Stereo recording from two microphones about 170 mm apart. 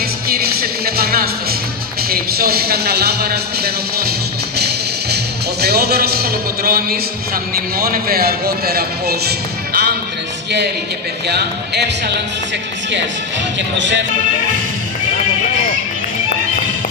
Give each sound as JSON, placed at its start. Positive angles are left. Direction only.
{"t": 0.3, "sound": "music", "side_deg": -65}
{"t": 2.0, "sound": "a man's voice", "side_deg": -65}
{"t": 5.1, "sound": "a man's voice", "side_deg": -70}
{"t": 11.2, "sound": "a man's voice", "side_deg": -75}
{"t": 13.6, "sound": "speech", "side_deg": -90}